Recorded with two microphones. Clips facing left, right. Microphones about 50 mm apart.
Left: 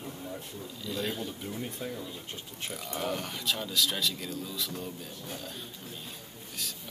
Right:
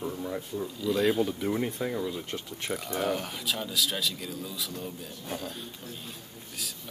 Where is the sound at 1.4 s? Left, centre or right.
Right.